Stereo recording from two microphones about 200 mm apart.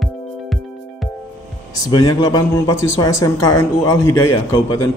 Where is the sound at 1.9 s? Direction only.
20° left (ahead or behind).